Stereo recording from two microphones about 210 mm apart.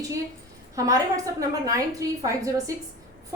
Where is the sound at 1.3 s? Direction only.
15° right (ahead or behind).